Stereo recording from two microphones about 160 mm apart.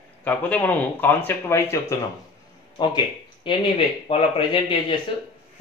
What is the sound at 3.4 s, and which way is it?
Speech, 35° left (ahead or behind).